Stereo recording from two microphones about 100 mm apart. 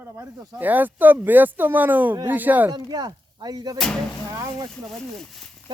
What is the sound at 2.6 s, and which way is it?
Speech, 45° right (ahead or behind).